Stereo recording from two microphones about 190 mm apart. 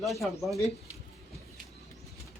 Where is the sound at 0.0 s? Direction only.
Centre (ahead or behind).